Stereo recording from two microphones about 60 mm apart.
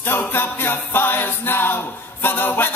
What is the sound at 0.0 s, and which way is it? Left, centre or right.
Music, left.